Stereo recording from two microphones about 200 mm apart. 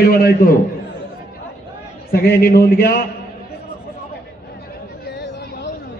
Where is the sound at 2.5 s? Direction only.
50° left (ahead or behind).